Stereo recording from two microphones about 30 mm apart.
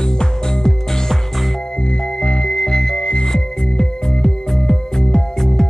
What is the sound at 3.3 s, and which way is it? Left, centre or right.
Music, left.